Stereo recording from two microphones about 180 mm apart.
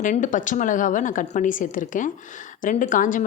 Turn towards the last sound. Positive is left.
turn(degrees=45)  # may be behind; listen again after turning